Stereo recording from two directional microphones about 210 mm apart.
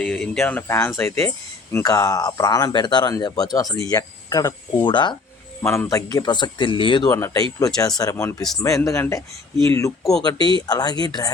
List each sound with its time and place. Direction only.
0.0 s speech: 5° left (ahead or behind); by 5.1 s 20° left (ahead or behind)
5.6 s speech: 10° left (ahead or behind)
10.0 s speech: centre (ahead or behind)
10.7 s speech: 20° left (ahead or behind)